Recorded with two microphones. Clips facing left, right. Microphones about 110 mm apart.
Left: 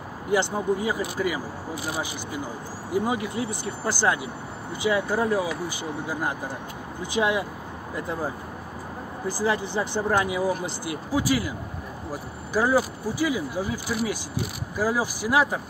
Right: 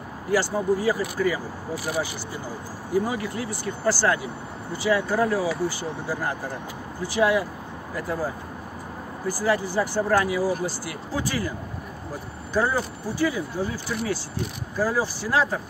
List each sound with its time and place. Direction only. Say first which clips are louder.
0.3 s speech: right 1 dB; 20° left (ahead or behind)
2.9 s speech: right 1 dB; 20° left (ahead or behind)
7.0 s speech: right 3 dB; 20° left (ahead or behind)
9.3 s speech: right 2 dB; 20° left (ahead or behind)
12.5 s speech: left 2 dB; 10° left (ahead or behind)